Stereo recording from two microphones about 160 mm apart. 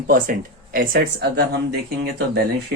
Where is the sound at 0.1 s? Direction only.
60° right (ahead or behind).